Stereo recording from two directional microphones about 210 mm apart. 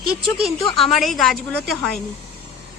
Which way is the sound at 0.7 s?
Centre (ahead or behind).